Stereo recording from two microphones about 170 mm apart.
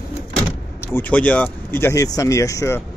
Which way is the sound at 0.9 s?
10° left (ahead or behind).